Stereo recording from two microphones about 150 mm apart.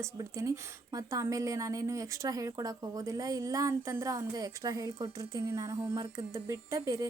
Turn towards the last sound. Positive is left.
turn(degrees=-20)  # may be behind; listen again after turning